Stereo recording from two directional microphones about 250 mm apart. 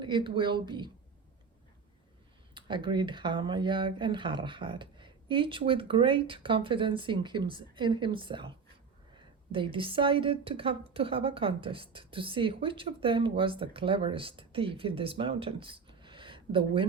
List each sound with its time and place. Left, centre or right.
0.0 s a woman's voice: centre
2.6 s a woman's voice: centre